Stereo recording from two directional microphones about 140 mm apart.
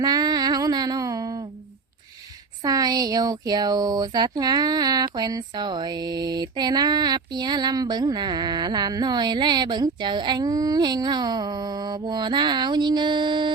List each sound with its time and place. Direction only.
0.0 s female singing: 30° right (ahead or behind)
2.6 s speech: 25° right (ahead or behind)